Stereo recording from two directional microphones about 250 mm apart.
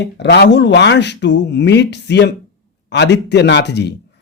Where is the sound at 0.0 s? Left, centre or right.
Left.